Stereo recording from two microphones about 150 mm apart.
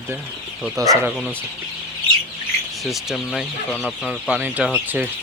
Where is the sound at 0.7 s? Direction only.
20° right (ahead or behind).